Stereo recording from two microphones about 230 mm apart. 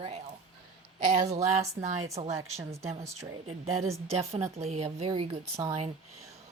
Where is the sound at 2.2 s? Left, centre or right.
Right.